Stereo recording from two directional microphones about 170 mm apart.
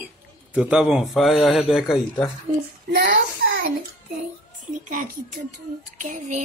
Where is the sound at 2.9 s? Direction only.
70° right (ahead or behind).